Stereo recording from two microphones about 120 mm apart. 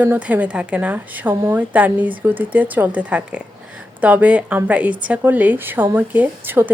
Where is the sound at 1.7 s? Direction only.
15° right (ahead or behind).